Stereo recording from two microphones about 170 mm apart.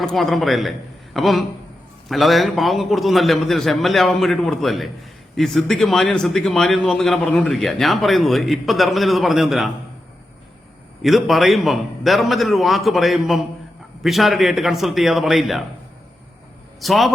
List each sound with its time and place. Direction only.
0.0 s speech: centre (ahead or behind)
11.0 s speech: centre (ahead or behind)
16.8 s speech: centre (ahead or behind)